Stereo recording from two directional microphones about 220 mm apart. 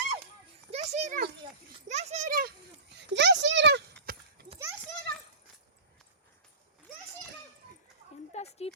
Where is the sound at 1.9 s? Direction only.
30° right (ahead or behind).